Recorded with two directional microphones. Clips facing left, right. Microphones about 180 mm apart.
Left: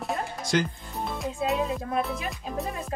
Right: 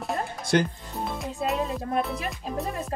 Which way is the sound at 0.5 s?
55° right (ahead or behind).